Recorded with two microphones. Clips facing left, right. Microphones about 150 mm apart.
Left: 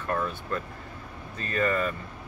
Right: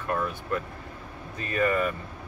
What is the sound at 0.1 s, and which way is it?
Speech, 10° right (ahead or behind).